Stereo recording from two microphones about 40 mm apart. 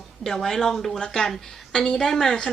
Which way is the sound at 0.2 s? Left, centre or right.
Centre.